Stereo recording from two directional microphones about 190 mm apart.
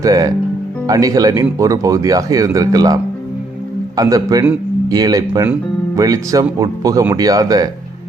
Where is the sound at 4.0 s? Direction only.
20° right (ahead or behind).